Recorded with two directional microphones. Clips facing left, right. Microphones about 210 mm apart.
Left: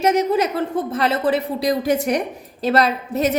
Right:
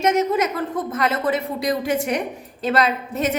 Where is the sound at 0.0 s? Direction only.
35° left (ahead or behind).